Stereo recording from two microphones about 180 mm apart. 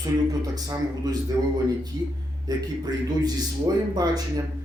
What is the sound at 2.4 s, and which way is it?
A man's voice, 20° right (ahead or behind).